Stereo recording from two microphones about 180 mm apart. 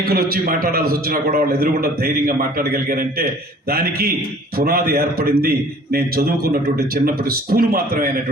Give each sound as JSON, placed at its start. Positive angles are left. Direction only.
{"t": 0.0, "sound": "a man's voice", "side_deg": -55}